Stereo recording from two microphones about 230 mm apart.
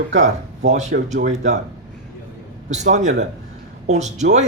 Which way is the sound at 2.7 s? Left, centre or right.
Right.